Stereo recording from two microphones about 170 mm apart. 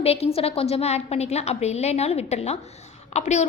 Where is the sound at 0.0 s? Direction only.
35° left (ahead or behind).